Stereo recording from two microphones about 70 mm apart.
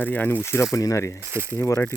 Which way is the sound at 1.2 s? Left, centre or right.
Right.